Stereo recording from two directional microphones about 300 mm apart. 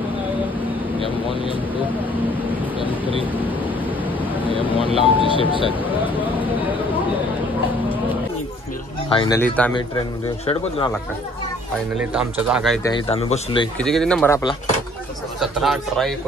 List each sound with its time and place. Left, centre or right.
4.5 s speech: centre
9.1 s speech: centre
12.0 s speech: centre
12.9 s speech: centre
13.7 s speech: centre
15.4 s speech: centre